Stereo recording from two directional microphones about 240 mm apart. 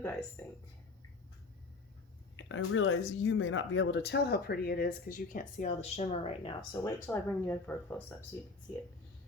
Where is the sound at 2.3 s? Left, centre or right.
Left; by 8.0 s centre.